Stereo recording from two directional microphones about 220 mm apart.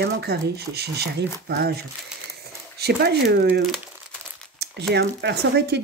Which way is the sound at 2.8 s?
50° right (ahead or behind).